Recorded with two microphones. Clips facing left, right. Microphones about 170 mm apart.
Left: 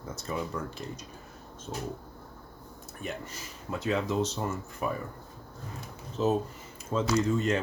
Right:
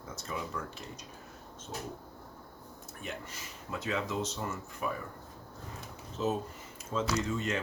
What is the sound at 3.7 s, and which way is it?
A man's voice, 35° left (ahead or behind).